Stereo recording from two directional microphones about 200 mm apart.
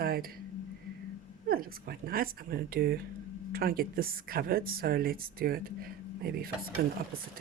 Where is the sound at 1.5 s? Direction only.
50° right (ahead or behind).